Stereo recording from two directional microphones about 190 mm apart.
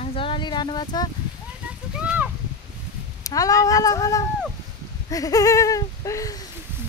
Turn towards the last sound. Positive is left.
turn(degrees=20)  # may be behind; listen again after turning